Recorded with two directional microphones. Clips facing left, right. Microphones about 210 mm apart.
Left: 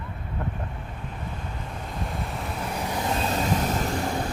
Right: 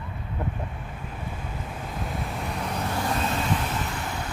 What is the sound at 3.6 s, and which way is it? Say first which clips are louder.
Vehicle: left 5 dB; 40° left (ahead or behind).